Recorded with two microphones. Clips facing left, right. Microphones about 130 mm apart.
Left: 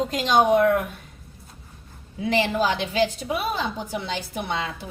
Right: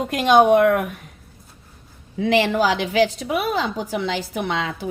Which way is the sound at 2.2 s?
85° right.